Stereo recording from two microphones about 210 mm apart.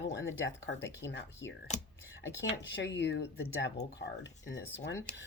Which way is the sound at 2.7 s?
55° left (ahead or behind).